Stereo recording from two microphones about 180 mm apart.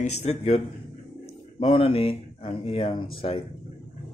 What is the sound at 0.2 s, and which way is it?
Speech, 35° left (ahead or behind).